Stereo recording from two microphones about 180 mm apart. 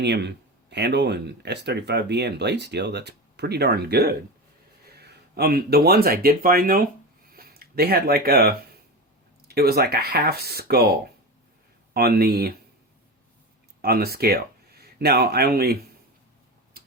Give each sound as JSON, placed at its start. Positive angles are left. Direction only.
{"t": 0.0, "sound": "speech", "side_deg": -70}
{"t": 11.9, "sound": "speech", "side_deg": -60}
{"t": 13.8, "sound": "speech", "side_deg": -60}